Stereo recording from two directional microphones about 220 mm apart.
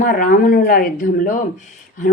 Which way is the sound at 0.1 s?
40° left (ahead or behind).